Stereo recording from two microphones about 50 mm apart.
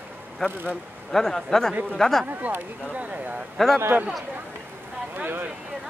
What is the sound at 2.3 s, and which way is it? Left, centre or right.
Speech, right.